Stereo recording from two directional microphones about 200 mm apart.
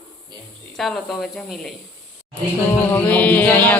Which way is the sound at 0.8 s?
Centre (ahead or behind).